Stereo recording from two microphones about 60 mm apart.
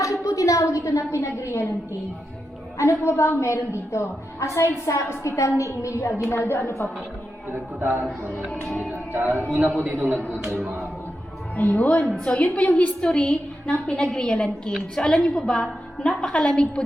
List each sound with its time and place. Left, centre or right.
0.0 s a woman's voice: left
2.7 s a woman's voice: left
7.5 s a man's voice: right
8.4 s a woman's voice: centre
8.8 s speech: right
9.4 s a man's voice: centre
9.8 s a man's voice: right
10.2 s a woman's voice: left
11.5 s a woman's voice: left